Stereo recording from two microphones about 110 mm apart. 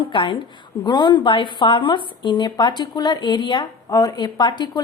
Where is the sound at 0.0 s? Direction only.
50° left (ahead or behind).